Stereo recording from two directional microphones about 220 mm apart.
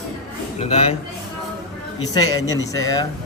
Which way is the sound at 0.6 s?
30° left (ahead or behind).